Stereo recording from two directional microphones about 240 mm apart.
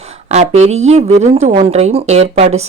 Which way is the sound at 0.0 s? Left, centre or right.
Right.